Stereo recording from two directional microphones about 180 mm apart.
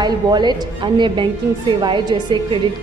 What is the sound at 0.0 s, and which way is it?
A woman's voice, 25° right (ahead or behind).